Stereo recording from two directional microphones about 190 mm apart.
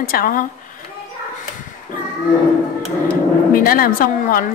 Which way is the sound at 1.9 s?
45° left (ahead or behind).